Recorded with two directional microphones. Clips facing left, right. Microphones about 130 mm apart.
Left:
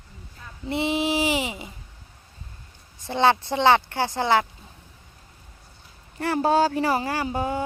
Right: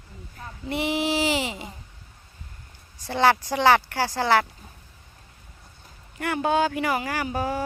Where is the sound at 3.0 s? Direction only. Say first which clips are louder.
Even; 20° left (ahead or behind).